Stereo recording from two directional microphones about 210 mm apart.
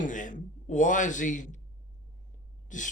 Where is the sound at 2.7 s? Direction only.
35° left (ahead or behind).